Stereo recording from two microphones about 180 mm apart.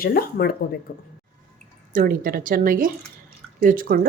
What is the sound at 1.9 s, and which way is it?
Speech, 50° right (ahead or behind).